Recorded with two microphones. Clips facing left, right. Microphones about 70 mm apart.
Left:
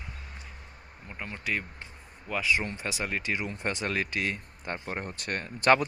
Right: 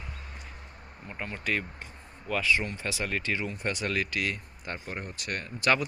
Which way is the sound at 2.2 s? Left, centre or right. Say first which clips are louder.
Right 1 dB; centre.